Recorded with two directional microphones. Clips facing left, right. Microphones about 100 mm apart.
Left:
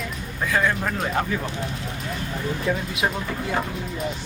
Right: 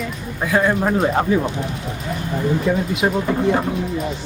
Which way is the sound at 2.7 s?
5° right (ahead or behind).